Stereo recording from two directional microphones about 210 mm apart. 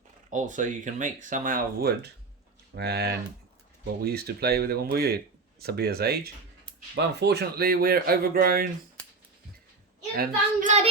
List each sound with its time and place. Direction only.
0.3 s speech: 35° right (ahead or behind)
10.2 s speech: 35° right (ahead or behind)